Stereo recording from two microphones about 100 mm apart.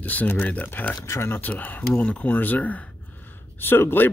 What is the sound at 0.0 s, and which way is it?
Speech, 15° left (ahead or behind).